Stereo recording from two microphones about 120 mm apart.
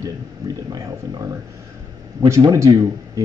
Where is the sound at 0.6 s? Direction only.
30° right (ahead or behind).